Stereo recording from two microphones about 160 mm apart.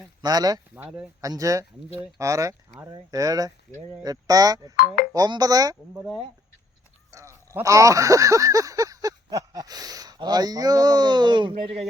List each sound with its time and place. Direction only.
0.0 s speech: 25° right (ahead or behind)
7.1 s speech: 20° right (ahead or behind); by 11.9 s 35° right (ahead or behind)